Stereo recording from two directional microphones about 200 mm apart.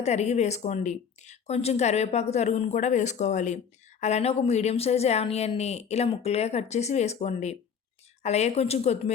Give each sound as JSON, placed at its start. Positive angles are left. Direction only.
{"t": 0.0, "sound": "speech", "side_deg": 35}